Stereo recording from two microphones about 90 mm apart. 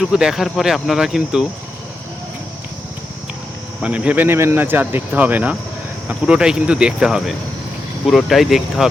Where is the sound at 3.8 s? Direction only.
15° right (ahead or behind).